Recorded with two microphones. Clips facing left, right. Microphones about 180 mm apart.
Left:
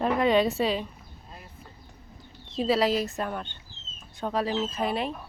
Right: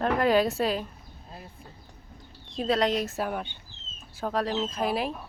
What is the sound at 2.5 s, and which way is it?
Speech, centre (ahead or behind).